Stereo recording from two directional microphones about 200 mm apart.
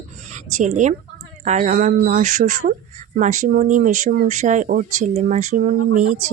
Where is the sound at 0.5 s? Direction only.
40° right (ahead or behind).